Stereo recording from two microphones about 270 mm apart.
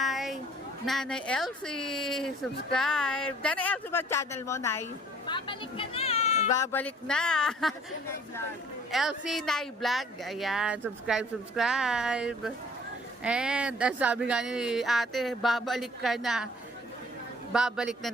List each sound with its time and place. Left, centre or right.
0.0 s a sound: centre
0.9 s speech: centre; by 6.5 s left
6.5 s speech: centre
8.9 s speech: centre
17.5 s speech: centre